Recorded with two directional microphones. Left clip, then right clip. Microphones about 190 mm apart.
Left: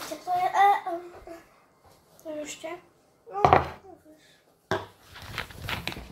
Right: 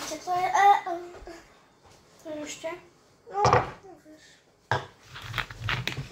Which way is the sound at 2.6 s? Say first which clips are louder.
Right 6 dB; 45° left (ahead or behind).